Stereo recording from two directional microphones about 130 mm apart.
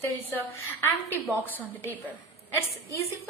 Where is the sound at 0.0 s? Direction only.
15° left (ahead or behind).